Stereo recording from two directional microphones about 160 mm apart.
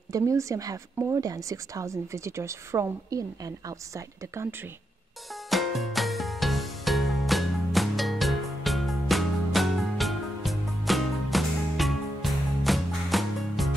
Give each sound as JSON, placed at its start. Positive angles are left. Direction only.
{"t": 0.1, "sound": "speech", "side_deg": -20}
{"t": 5.5, "sound": "music", "side_deg": 0}